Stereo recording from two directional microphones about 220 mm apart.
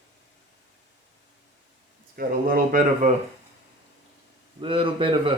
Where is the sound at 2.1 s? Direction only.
40° right (ahead or behind).